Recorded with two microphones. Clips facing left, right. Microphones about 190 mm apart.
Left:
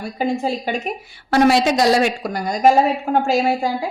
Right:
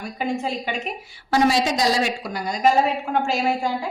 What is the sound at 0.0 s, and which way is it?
Speech, 35° left (ahead or behind).